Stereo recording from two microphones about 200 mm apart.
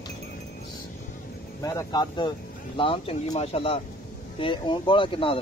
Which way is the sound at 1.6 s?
20° left (ahead or behind).